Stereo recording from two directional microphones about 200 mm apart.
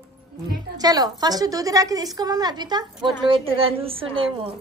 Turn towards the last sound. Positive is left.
turn(degrees=-25)  # may be behind; listen again after turning